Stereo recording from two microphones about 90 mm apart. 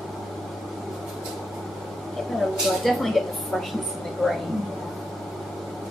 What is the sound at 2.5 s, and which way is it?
A woman's voice, centre (ahead or behind).